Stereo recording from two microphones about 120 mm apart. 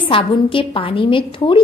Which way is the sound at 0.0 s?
45° left (ahead or behind).